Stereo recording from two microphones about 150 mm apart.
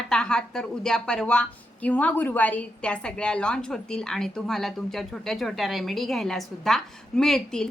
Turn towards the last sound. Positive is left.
turn(degrees=5)  # may be behind; listen again after turning